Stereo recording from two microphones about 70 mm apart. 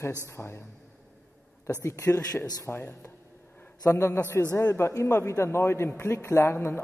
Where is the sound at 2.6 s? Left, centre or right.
Left.